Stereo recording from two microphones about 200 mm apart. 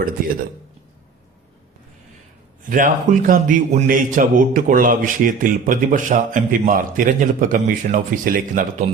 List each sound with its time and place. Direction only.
2.6 s a man's voice: 40° right (ahead or behind)